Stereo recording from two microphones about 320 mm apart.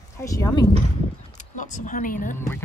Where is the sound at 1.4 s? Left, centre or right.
Left.